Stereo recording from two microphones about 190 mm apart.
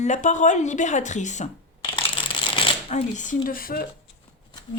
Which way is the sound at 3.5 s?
50° left (ahead or behind).